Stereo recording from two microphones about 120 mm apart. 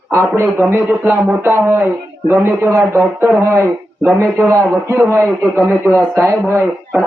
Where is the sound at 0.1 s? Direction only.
25° right (ahead or behind).